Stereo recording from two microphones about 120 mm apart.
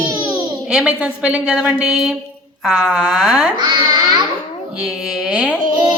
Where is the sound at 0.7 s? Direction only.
5° right (ahead or behind).